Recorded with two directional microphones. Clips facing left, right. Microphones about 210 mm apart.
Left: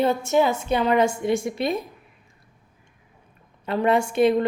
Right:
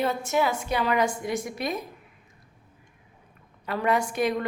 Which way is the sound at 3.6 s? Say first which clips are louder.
Left 4 dB; 25° left (ahead or behind).